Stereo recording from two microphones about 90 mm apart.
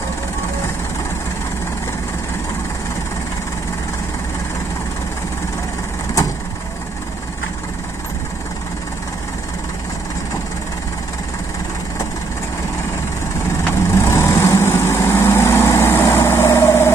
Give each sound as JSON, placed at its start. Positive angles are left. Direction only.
{"t": 13.8, "sound": "vehicle", "side_deg": 30}